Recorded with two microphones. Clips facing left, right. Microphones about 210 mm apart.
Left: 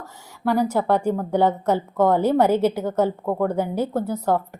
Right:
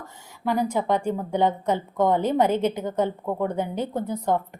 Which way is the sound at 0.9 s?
10° left (ahead or behind).